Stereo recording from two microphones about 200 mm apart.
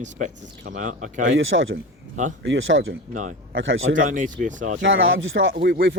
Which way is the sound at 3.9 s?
40° right (ahead or behind).